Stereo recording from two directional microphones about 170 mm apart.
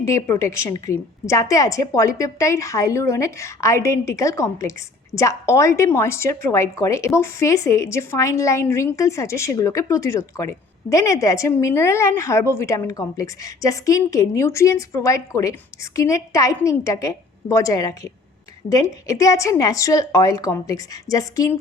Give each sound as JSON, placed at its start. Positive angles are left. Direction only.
{"t": 0.0, "sound": "a woman's voice", "side_deg": 20}